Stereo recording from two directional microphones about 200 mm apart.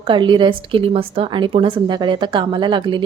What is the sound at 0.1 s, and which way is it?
A woman's voice, 25° right (ahead or behind).